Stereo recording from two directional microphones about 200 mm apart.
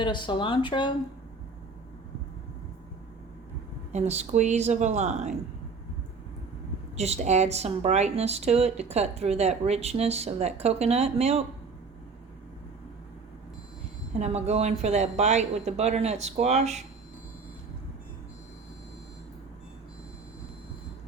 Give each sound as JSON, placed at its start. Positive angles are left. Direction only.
{"t": 0.0, "sound": "speech", "side_deg": 25}
{"t": 3.9, "sound": "a woman's voice", "side_deg": -35}
{"t": 6.9, "sound": "a woman's voice", "side_deg": -30}
{"t": 14.1, "sound": "a woman's voice", "side_deg": -35}